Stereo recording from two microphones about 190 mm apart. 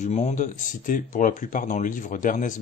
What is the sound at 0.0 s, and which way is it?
Speech, 35° left (ahead or behind).